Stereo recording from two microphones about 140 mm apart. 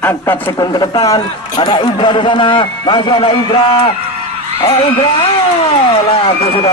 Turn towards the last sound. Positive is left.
turn(degrees=35)  # may be behind; listen again after turning